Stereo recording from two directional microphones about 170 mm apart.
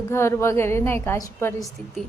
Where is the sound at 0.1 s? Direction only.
15° left (ahead or behind).